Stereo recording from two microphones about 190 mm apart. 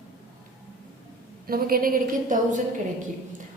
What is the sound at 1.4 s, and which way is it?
A woman's voice, 50° right (ahead or behind).